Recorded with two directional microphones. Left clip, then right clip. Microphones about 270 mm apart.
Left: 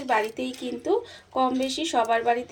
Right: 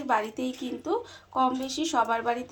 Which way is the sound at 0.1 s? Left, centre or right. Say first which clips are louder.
Left 2 dB; right.